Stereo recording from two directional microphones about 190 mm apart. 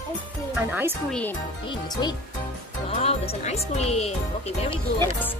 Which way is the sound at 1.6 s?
25° left (ahead or behind).